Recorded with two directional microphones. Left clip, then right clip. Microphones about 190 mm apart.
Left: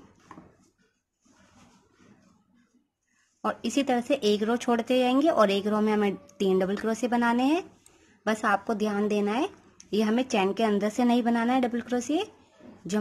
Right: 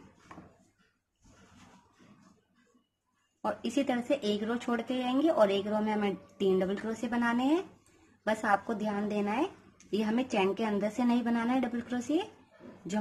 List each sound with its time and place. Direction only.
3.4 s speech: 30° left (ahead or behind)